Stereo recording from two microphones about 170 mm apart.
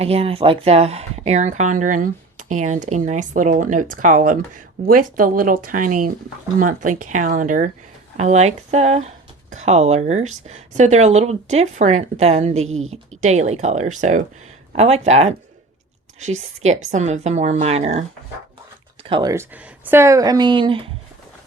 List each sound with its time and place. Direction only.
0.0 s speech: 35° right (ahead or behind)
19.0 s speech: 30° right (ahead or behind)
19.3 s speech: 10° right (ahead or behind); by 20.9 s 30° right (ahead or behind)